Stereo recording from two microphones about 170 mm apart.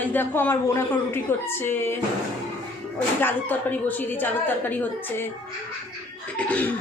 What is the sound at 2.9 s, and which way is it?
A woman's voice, 10° left (ahead or behind).